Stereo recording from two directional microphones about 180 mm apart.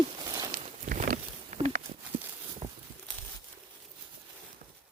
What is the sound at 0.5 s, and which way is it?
Walk, 50° right (ahead or behind).